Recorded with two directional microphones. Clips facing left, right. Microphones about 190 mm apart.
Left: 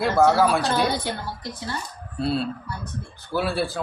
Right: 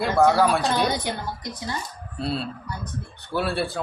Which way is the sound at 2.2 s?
Centre (ahead or behind).